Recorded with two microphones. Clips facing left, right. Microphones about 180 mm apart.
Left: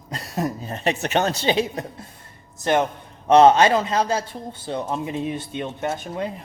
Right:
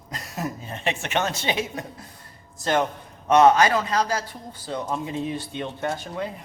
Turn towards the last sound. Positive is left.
turn(degrees=25)  # may be behind; listen again after turning